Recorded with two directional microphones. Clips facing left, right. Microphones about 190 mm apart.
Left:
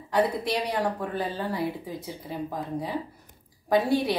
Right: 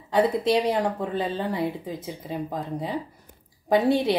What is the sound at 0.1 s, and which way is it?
Speech, 25° right (ahead or behind).